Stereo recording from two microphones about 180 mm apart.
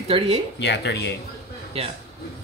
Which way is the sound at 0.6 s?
70° left (ahead or behind).